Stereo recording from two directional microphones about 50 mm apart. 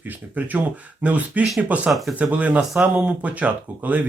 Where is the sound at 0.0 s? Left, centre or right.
Right.